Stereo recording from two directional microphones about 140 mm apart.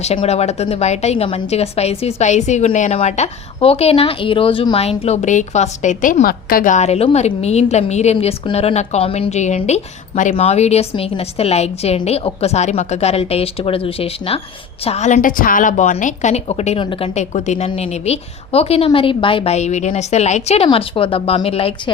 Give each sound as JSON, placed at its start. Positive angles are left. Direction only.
{"t": 0.3, "sound": "a woman's voice", "side_deg": 50}
{"t": 14.8, "sound": "a woman's voice", "side_deg": 55}
{"t": 17.2, "sound": "a woman's voice", "side_deg": 55}
{"t": 19.5, "sound": "a woman's voice", "side_deg": 55}
{"t": 20.7, "sound": "speech", "side_deg": 40}